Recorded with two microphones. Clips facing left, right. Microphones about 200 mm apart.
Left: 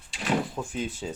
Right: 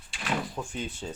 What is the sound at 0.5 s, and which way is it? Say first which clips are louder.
Speech: left 3 dB; 5° left (ahead or behind).